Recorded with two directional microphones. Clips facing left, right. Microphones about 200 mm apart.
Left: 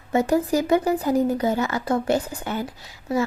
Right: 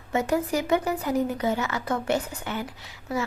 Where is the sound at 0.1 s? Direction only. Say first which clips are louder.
Left 5 dB; 35° left (ahead or behind).